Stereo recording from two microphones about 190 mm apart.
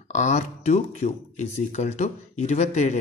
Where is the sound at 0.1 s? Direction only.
40° left (ahead or behind).